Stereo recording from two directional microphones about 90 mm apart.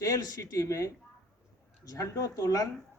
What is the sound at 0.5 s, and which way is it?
A man's voice, 35° left (ahead or behind).